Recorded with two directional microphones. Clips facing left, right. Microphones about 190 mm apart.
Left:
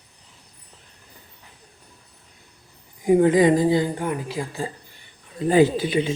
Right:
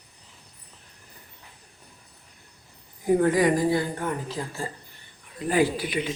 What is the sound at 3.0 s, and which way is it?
A woman's voice, 15° left (ahead or behind).